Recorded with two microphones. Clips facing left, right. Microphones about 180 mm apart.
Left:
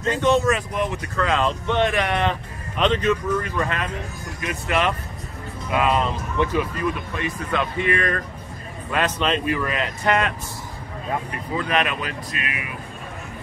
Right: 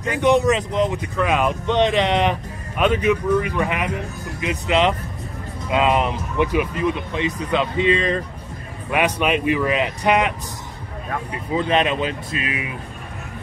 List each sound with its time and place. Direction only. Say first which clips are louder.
0.0 s speech: right 2 dB; 15° right (ahead or behind)
11.5 s speech: right 4 dB; 25° right (ahead or behind)